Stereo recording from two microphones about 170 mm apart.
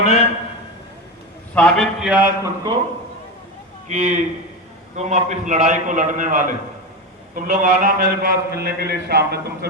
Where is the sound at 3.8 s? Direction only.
45° right (ahead or behind); by 9.6 s 70° right (ahead or behind).